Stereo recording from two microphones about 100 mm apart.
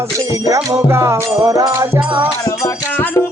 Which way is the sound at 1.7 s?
25° right (ahead or behind).